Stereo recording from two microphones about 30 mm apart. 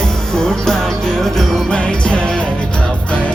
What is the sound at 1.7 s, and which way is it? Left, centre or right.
Music, left.